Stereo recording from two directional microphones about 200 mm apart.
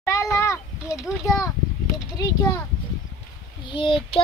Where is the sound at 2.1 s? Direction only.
20° left (ahead or behind).